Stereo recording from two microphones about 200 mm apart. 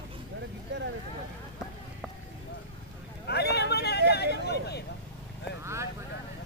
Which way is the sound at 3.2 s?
55° left (ahead or behind).